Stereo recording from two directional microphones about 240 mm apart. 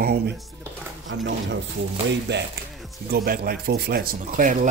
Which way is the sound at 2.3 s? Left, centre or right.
Right.